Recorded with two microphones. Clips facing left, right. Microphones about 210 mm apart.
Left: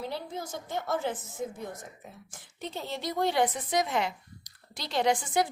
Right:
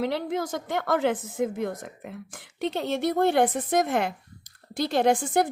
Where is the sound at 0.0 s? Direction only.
90° right.